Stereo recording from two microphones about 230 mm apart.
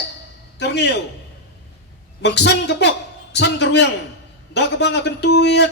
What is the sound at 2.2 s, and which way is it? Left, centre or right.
A man's voice, left.